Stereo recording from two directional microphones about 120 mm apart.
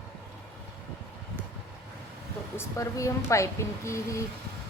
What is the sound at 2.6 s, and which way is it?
A woman's voice, 25° left (ahead or behind).